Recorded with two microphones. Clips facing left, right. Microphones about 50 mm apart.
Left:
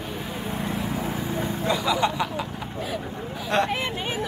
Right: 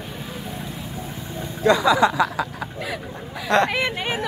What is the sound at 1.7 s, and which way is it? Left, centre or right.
Speech, right.